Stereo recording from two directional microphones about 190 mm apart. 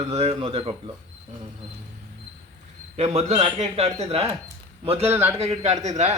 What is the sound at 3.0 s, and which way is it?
A man's voice, 35° right (ahead or behind).